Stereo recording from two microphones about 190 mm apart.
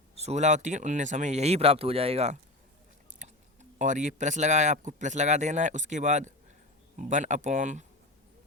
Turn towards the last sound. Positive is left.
turn(degrees=-40)  # may be behind; listen again after turning